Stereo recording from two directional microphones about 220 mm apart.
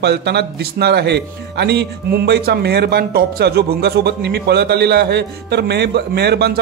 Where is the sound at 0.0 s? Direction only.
50° right (ahead or behind).